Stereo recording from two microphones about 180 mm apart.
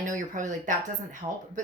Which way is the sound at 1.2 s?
25° right (ahead or behind).